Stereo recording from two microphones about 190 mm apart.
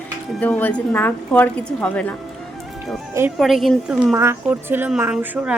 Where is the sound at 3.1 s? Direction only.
15° right (ahead or behind).